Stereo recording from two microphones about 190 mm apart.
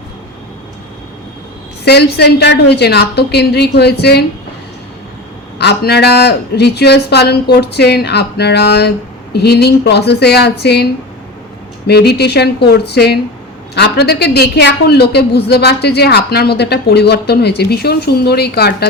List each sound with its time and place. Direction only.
1.8 s a woman's voice: 60° left (ahead or behind)
5.5 s a woman's voice: 60° left (ahead or behind)
11.9 s a woman's voice: 60° left (ahead or behind)